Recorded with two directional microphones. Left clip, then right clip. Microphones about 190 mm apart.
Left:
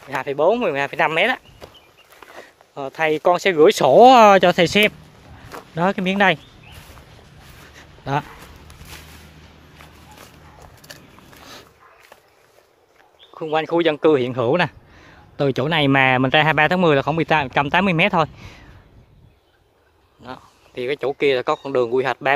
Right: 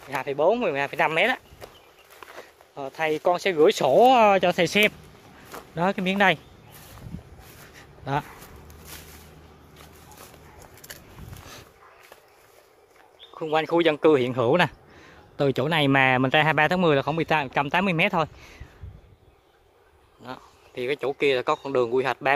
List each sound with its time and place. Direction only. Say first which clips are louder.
0.0 s speech: left 4 dB; 15° left (ahead or behind)
2.7 s speech: left 6 dB; 35° left (ahead or behind); by 6.4 s centre (ahead or behind)
7.7 s a sound: left 5 dB; centre (ahead or behind)
10.6 s a sound: left 3 dB; 5° left (ahead or behind)
13.3 s speech: left 3 dB; 5° left (ahead or behind)
20.2 s speech: left 3 dB; 5° left (ahead or behind)